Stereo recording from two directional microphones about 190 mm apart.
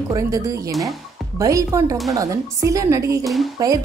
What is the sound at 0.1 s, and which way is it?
Speech, 20° right (ahead or behind).